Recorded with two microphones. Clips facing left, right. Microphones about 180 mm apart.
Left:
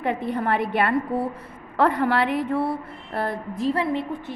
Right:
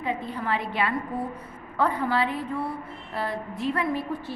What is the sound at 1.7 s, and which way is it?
A woman's voice, 75° left (ahead or behind).